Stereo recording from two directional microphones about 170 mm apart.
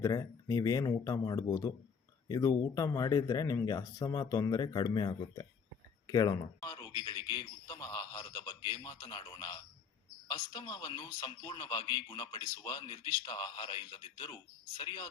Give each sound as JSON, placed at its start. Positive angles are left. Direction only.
{"t": 0.0, "sound": "a man's voice", "side_deg": 20}